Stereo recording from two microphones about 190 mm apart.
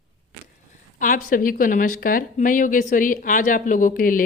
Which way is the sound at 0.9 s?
45° left (ahead or behind).